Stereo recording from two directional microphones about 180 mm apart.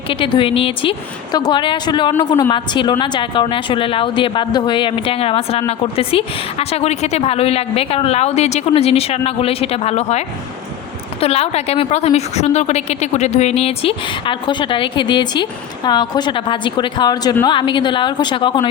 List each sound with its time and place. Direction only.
0.1 s a woman's voice: 30° left (ahead or behind)